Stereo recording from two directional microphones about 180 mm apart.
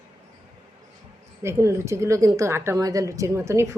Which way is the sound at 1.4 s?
15° right (ahead or behind).